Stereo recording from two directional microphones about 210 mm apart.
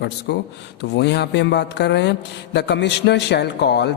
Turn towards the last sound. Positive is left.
turn(degrees=55)  # may be behind; listen again after turning